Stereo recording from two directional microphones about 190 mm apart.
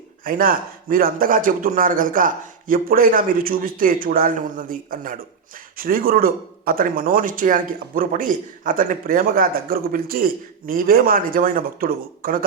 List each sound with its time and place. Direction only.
0.3 s speech: 50° right (ahead or behind)